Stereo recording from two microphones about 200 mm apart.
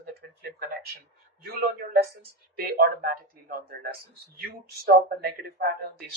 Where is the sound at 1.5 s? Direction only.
50° right (ahead or behind).